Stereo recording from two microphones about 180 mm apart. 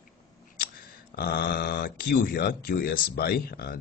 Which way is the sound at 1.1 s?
55° left (ahead or behind).